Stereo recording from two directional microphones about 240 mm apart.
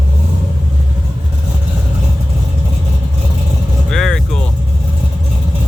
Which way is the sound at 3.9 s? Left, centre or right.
Centre.